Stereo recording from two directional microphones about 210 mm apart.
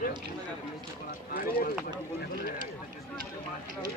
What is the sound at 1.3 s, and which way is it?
Speech, 45° left (ahead or behind).